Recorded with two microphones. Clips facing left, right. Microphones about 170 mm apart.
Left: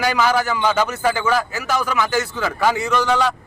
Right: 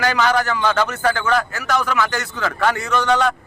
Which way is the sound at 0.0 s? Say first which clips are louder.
Even; 10° left (ahead or behind).